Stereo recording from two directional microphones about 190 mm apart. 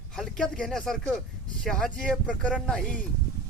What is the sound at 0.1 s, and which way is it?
Speech, 5° left (ahead or behind).